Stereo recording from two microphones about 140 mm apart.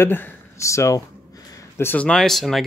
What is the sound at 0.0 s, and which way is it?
Speech, 15° left (ahead or behind).